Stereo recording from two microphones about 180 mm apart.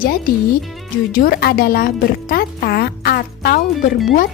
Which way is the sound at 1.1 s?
50° left (ahead or behind).